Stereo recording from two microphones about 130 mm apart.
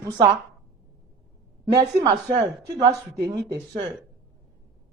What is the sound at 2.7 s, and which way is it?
Speech, 35° right (ahead or behind).